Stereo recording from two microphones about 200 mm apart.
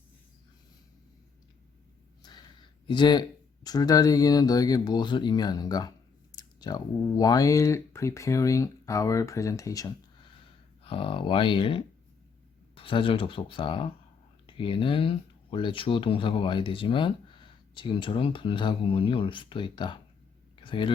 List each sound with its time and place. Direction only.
2.2 s speech: 25° left (ahead or behind)